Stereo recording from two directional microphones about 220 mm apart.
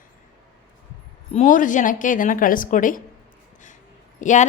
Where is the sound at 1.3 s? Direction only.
35° left (ahead or behind).